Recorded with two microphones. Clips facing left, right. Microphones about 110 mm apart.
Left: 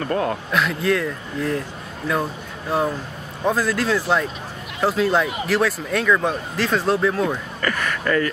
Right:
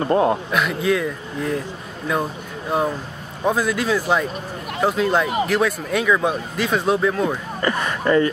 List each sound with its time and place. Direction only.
0.0 s speech: 25° right (ahead or behind)
0.5 s speech: 5° right (ahead or behind)
3.4 s speech: centre (ahead or behind)
7.6 s speech: 20° right (ahead or behind)